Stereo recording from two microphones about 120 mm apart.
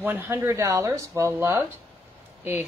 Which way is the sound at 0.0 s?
15° right (ahead or behind).